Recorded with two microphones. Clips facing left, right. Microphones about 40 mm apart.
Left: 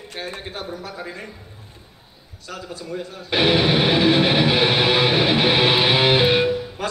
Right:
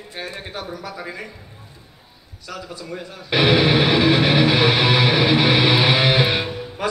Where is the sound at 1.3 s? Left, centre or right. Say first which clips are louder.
Even; centre.